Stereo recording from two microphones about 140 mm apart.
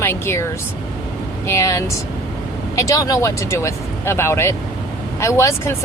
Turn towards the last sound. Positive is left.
turn(degrees=20)  # may be behind; listen again after turning